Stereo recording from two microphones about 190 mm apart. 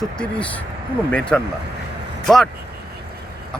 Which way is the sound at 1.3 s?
5° left (ahead or behind).